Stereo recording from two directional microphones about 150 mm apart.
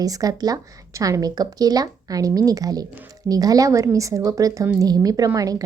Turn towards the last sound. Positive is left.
turn(degrees=-25)  # may be behind; listen again after turning